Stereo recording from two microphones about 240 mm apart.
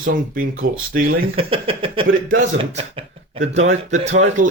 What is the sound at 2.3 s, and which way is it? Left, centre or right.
Speech, right.